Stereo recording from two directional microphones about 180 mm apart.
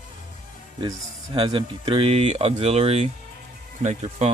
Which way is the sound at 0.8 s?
25° right (ahead or behind).